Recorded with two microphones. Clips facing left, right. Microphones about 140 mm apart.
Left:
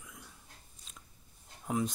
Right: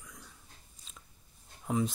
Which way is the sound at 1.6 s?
Centre (ahead or behind).